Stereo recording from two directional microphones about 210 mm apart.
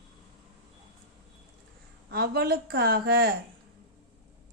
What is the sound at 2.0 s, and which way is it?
A woman's voice, 50° right (ahead or behind).